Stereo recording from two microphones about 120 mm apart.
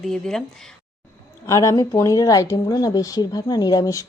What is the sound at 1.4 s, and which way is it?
Speech, 30° left (ahead or behind).